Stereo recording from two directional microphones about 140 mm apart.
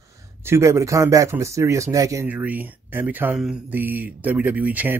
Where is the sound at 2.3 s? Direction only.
10° right (ahead or behind).